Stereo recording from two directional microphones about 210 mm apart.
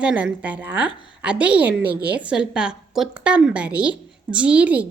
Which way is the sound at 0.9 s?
25° left (ahead or behind).